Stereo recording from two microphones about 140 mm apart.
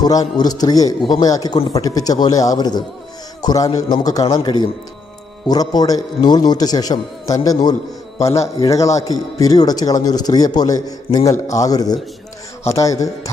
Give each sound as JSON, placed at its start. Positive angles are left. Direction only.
{"t": 0.0, "sound": "speech", "side_deg": 30}